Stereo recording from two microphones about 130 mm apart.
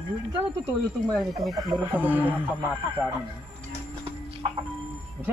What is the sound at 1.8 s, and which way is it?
Music, 15° right (ahead or behind).